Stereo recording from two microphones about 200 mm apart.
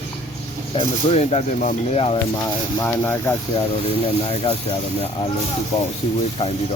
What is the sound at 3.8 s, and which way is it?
Speech, 30° left (ahead or behind).